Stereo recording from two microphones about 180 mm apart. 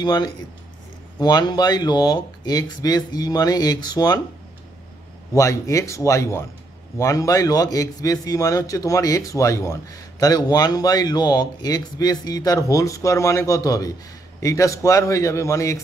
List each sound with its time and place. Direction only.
0.0 s a man's voice: 25° left (ahead or behind)
5.3 s a man's voice: 15° left (ahead or behind)